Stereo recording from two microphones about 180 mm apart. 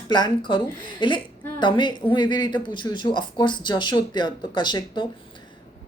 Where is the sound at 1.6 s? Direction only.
25° left (ahead or behind).